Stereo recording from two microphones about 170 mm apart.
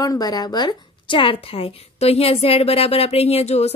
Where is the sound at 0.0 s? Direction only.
20° left (ahead or behind).